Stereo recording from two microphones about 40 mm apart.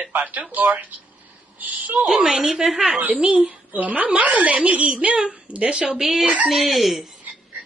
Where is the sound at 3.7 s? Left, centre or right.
Right; by 7.0 s centre.